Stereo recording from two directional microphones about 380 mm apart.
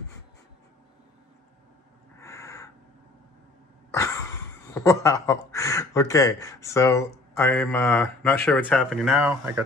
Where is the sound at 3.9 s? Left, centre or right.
Centre.